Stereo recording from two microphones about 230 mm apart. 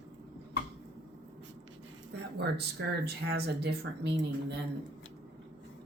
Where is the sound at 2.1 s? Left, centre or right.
Right.